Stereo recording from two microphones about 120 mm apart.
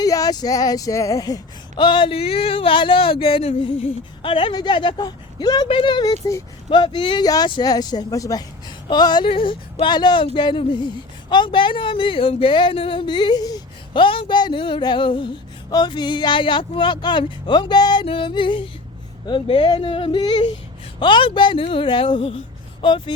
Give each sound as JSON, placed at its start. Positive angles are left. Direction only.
{"t": 0.0, "sound": "speech", "side_deg": 30}
{"t": 5.6, "sound": "speech", "side_deg": 45}
{"t": 6.7, "sound": "speech", "side_deg": 40}